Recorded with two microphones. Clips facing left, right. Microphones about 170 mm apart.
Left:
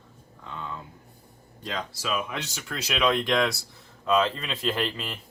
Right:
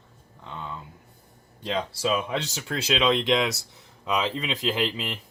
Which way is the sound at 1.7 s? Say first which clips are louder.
Right 5 dB; 30° right (ahead or behind).